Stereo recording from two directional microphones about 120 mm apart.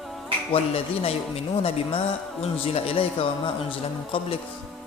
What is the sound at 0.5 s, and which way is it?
A man's voice, 55° left (ahead or behind).